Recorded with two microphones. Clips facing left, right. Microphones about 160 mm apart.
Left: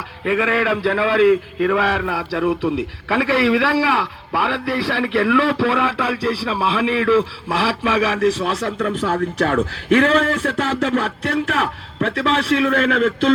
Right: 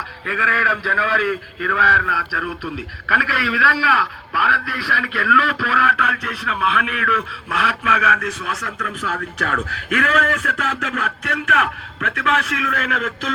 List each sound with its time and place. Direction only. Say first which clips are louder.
0.3 s a man's voice: left 6 dB; 20° left (ahead or behind)